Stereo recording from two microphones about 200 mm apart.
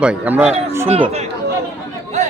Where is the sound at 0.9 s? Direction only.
30° right (ahead or behind).